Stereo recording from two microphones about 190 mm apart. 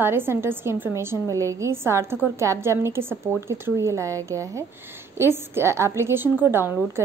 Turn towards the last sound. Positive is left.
turn(degrees=-10)  # may be behind; listen again after turning